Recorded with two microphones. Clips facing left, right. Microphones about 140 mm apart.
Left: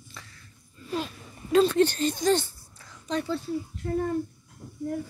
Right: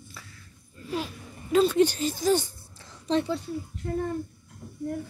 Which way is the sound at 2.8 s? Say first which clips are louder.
Right 4 dB; 30° right (ahead or behind).